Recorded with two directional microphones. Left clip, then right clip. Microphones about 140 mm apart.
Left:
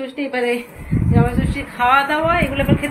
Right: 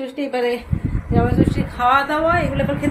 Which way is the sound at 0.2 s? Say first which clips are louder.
Left 1 dB; 20° right (ahead or behind).